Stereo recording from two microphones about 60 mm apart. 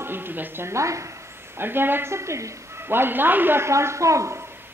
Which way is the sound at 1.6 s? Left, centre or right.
Right.